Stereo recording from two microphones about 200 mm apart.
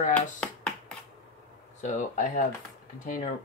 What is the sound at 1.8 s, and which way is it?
Speech, 40° left (ahead or behind).